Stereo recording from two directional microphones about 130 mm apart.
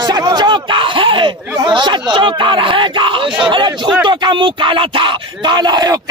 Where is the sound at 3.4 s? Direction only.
40° right (ahead or behind).